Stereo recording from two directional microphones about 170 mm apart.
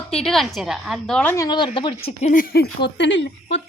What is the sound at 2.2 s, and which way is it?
Speech, 50° left (ahead or behind).